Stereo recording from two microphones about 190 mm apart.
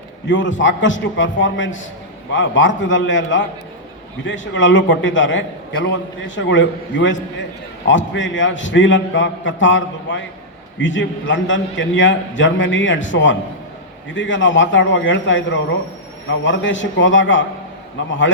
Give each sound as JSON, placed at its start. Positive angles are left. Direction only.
{"t": 0.3, "sound": "a man's voice", "side_deg": 75}